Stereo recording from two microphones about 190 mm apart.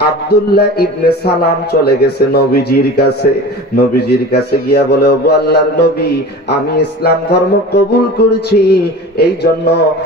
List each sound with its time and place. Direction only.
0.0 s a man's voice: 55° left (ahead or behind)